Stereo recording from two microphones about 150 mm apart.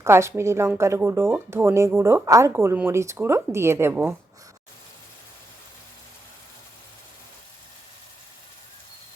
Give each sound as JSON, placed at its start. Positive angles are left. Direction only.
{"t": 0.0, "sound": "speech", "side_deg": -20}